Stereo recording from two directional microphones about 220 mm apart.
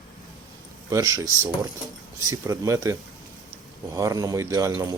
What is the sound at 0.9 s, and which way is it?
Speech, 15° right (ahead or behind).